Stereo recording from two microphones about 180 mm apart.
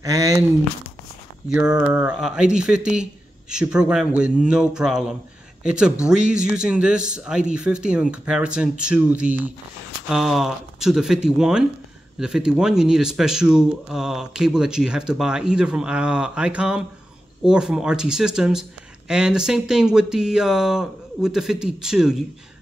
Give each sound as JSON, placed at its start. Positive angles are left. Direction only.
{"t": 0.0, "sound": "speech", "side_deg": -20}
{"t": 1.5, "sound": "speech", "side_deg": -5}